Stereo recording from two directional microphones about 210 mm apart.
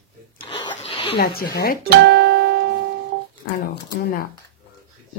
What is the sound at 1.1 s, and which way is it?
Speech, 45° left (ahead or behind).